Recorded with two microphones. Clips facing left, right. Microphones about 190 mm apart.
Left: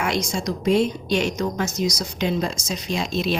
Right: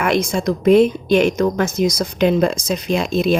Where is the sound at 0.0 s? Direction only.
55° right (ahead or behind).